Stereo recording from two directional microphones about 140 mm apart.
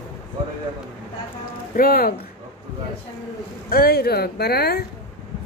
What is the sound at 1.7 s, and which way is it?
Speech, 90° left.